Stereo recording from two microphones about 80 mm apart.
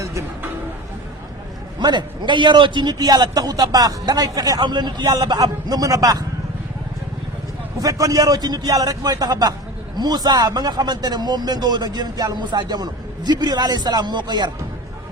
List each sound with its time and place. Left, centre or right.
1.8 s a man's voice: right
7.8 s a man's voice: right